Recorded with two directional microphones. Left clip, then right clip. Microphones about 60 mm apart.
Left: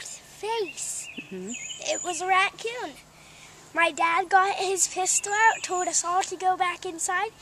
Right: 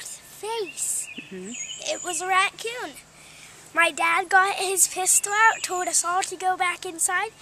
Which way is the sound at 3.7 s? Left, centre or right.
Centre.